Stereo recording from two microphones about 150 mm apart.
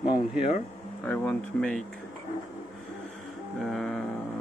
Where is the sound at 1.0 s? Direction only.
10° left (ahead or behind).